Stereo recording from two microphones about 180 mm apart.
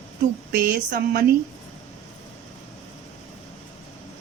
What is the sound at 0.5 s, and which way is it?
Speech, 60° right (ahead or behind).